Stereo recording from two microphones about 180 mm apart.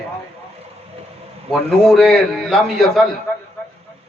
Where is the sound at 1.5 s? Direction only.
Centre (ahead or behind).